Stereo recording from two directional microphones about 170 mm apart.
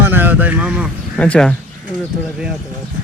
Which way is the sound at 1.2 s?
5° left (ahead or behind).